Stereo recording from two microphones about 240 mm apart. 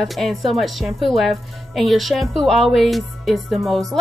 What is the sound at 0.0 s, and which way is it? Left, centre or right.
A woman's voice, centre.